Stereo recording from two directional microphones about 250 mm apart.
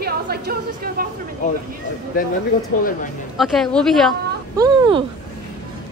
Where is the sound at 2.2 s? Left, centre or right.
Left.